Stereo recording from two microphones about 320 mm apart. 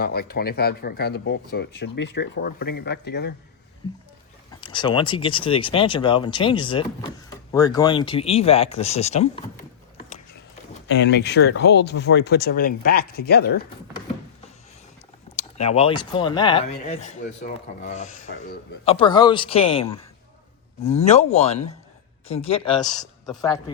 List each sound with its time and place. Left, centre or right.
0.0 s speech: left
4.6 s speech: centre
10.8 s speech: left
15.4 s speech: centre